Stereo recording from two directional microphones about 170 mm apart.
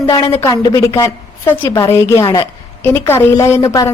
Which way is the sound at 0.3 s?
20° left (ahead or behind).